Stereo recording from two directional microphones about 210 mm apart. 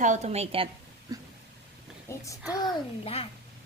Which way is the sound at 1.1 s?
15° right (ahead or behind).